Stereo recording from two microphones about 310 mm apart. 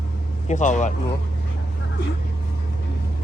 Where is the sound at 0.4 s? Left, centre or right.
Left.